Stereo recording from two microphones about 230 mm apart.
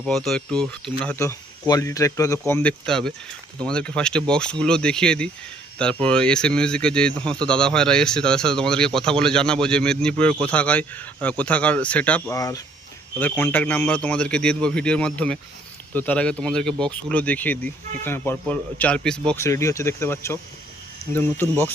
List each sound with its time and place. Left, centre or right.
0.0 s speech: centre